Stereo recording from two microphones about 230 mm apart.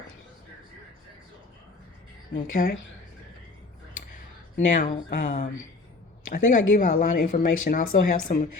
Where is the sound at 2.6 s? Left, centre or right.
Left.